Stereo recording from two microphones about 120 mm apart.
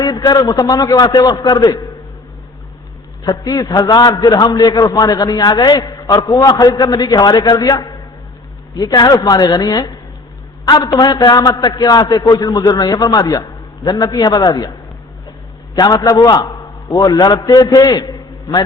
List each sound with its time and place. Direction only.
0.0 s a man's voice: 35° left (ahead or behind)
3.2 s a man's voice: 30° left (ahead or behind)
10.8 s a man's voice: 25° left (ahead or behind)
11.0 s a man's voice: 35° left (ahead or behind)
15.7 s a man's voice: 30° left (ahead or behind)